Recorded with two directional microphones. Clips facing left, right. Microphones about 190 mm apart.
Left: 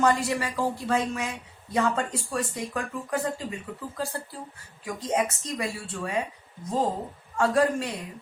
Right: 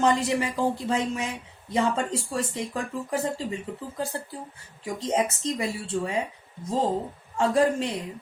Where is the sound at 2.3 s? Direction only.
25° right (ahead or behind).